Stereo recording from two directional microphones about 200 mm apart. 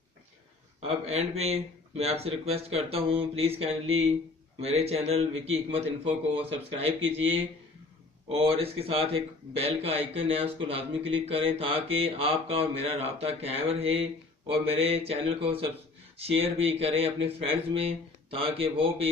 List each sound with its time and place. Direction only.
0.8 s speech: 30° right (ahead or behind)
2.2 s mantra: 30° right (ahead or behind)
4.6 s speech: 30° right (ahead or behind)
6.3 s mantra: 30° right (ahead or behind)